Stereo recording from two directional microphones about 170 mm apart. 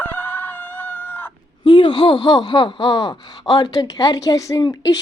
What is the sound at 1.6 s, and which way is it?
Speech, 30° left (ahead or behind).